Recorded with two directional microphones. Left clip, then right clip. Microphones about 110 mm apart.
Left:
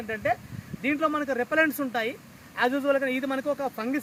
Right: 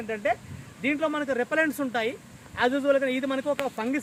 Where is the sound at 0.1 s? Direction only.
30° right (ahead or behind).